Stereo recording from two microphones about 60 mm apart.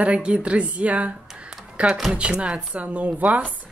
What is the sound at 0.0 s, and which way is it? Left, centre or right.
Speech, right.